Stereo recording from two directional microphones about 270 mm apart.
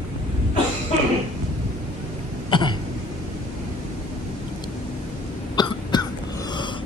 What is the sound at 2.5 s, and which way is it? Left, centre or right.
Cough, centre.